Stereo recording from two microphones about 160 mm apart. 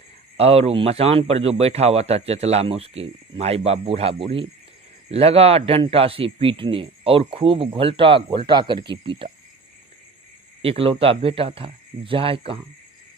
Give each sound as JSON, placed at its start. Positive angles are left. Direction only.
{"t": 0.3, "sound": "a man's voice", "side_deg": -40}
{"t": 10.6, "sound": "a man's voice", "side_deg": -35}